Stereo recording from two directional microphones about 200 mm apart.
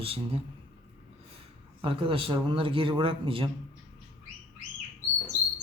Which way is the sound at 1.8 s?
25° right (ahead or behind).